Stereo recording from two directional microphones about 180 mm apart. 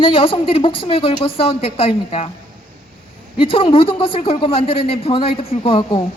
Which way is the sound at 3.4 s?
30° left (ahead or behind).